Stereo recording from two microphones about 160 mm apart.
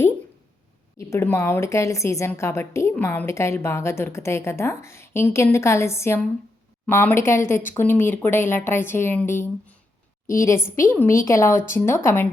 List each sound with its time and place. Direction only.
0.9 s a woman's voice: 15° left (ahead or behind)